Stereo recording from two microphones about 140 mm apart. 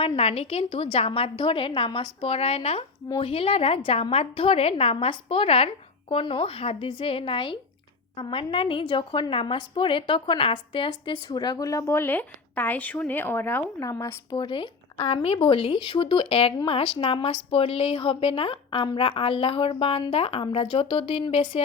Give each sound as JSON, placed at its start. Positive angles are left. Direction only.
{"t": 0.2, "sound": "a woman's voice", "side_deg": 45}